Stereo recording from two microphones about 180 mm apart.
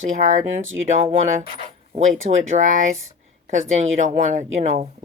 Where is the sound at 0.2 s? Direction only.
40° right (ahead or behind).